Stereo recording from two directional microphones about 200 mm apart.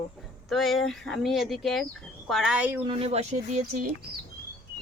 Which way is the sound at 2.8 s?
30° right (ahead or behind).